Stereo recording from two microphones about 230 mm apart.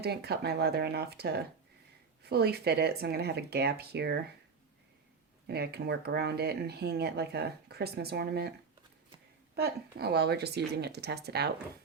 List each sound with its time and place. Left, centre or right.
0.0 s speech: right
5.5 s speech: right
9.6 s speech: right